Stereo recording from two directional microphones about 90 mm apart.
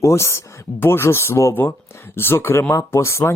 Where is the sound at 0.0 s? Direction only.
30° left (ahead or behind).